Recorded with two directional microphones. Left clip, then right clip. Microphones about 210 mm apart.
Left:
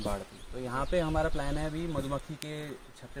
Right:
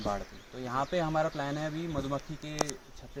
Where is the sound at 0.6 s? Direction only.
20° left (ahead or behind).